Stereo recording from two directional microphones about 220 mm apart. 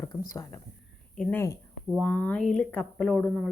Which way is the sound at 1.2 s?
10° left (ahead or behind).